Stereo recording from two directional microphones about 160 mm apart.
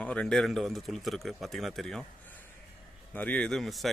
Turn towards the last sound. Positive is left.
turn(degrees=0)  # may be behind; listen again after turning